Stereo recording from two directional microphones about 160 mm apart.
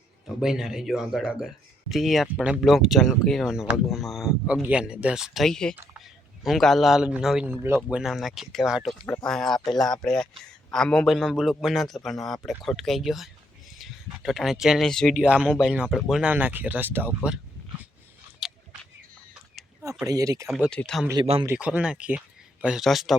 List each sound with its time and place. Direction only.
0.3 s speech: 5° right (ahead or behind)
7.4 s speech: 15° right (ahead or behind)
7.8 s speech: 5° right (ahead or behind)
15.1 s speech: 5° right (ahead or behind)
18.3 s a sound: 5° right (ahead or behind)
19.8 s speech: 20° right (ahead or behind)
20.5 s speech: 5° left (ahead or behind)
21.4 s speech: 10° right (ahead or behind)